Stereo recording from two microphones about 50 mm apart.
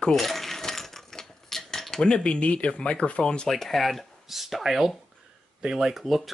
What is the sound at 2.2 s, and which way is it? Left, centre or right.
Speech, left.